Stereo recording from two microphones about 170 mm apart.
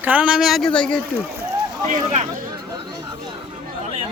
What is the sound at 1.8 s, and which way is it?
Speech, 45° right (ahead or behind).